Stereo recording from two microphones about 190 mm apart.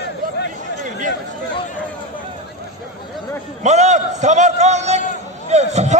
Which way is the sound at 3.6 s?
35° right (ahead or behind).